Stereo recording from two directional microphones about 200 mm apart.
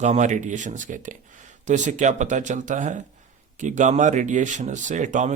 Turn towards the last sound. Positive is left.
turn(degrees=-40)  # may be behind; listen again after turning